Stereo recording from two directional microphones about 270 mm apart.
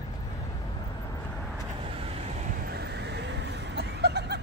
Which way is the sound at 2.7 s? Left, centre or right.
Right.